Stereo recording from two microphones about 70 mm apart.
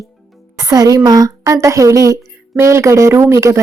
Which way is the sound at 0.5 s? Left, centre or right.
Right.